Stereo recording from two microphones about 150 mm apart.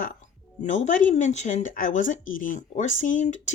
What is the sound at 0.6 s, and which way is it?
Speech, 55° left (ahead or behind).